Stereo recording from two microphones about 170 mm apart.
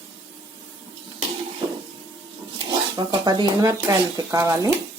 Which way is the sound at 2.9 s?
25° right (ahead or behind).